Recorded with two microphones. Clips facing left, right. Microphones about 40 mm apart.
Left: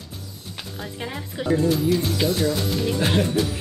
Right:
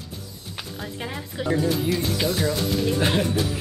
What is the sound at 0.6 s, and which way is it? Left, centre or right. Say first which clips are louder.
Speech: even; centre.